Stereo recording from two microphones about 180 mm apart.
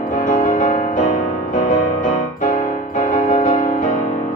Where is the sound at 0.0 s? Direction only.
45° left (ahead or behind).